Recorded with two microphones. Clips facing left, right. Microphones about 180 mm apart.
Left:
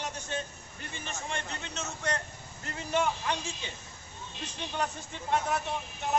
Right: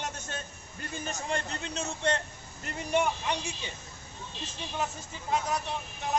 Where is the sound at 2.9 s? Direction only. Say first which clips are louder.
Right 1 dB; 15° right (ahead or behind).